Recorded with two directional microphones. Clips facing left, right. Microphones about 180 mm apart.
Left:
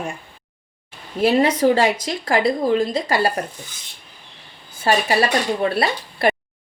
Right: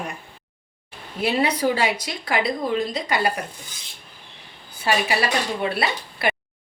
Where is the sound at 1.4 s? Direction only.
30° left (ahead or behind).